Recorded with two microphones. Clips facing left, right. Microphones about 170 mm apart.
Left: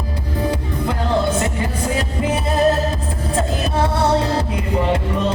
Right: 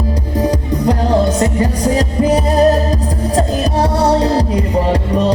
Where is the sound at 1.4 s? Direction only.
40° right (ahead or behind).